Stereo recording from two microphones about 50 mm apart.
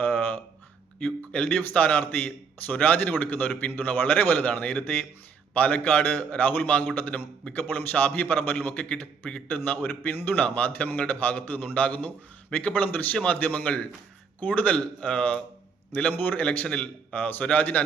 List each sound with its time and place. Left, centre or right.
0.0 s a sound: left
1.3 s a man's voice: left
13.4 s a man's voice: left
16.1 s a man's voice: left
16.4 s a man's voice: left
17.2 s a man's voice: left